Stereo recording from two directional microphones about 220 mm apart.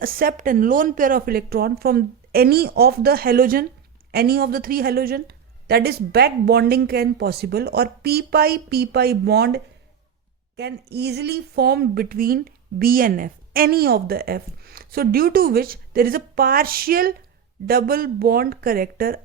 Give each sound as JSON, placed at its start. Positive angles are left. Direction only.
{"t": 0.0, "sound": "speech", "side_deg": -40}
{"t": 10.6, "sound": "speech", "side_deg": -50}